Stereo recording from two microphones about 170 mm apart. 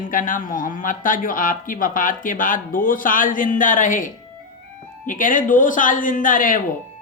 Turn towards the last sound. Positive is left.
turn(degrees=50)  # may be behind; listen again after turning